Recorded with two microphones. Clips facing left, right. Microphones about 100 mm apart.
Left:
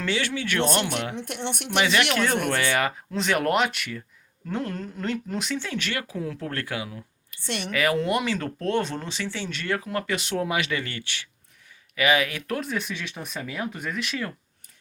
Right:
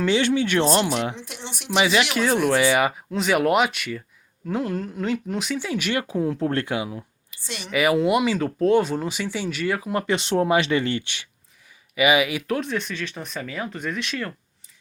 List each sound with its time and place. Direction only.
0.0 s speech: 20° right (ahead or behind)
1.1 s a woman's voice: 60° left (ahead or behind)
1.8 s speech: 10° right (ahead or behind)
6.0 s speech: 25° right (ahead or behind)
7.3 s a sound: 60° left (ahead or behind)
7.7 s speech: 10° right (ahead or behind)
9.9 s speech: 25° right (ahead or behind); by 12.4 s 10° right (ahead or behind)
12.5 s speech: centre (ahead or behind)